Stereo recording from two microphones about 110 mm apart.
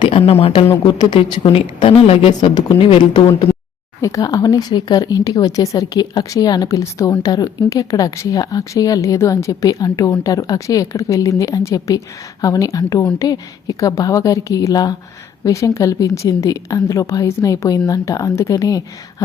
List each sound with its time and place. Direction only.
0.1 s a woman's voice: 60° left (ahead or behind)
0.5 s speech: 45° left (ahead or behind)
1.5 s a woman's voice: 55° left (ahead or behind)
4.0 s speech: 30° left (ahead or behind)